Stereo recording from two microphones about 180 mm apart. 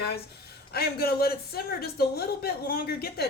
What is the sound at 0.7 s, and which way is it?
Speech, 60° left (ahead or behind).